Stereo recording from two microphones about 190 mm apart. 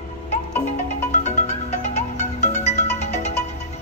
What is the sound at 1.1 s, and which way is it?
Music, 35° left (ahead or behind).